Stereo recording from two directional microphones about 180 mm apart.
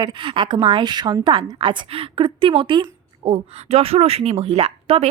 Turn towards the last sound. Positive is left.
turn(degrees=-35)  # may be behind; listen again after turning